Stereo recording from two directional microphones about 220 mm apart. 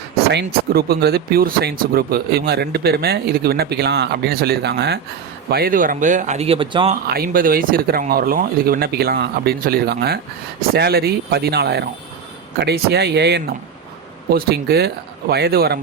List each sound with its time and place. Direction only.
0.3 s speech: 45° right (ahead or behind); by 6.9 s 25° right (ahead or behind)
7.1 s speech: 40° right (ahead or behind)